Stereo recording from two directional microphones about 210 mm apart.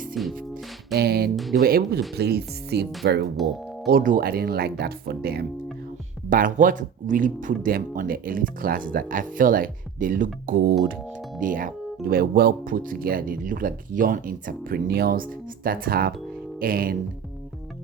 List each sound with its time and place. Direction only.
0.1 s music: centre (ahead or behind)
0.9 s speech: 50° right (ahead or behind)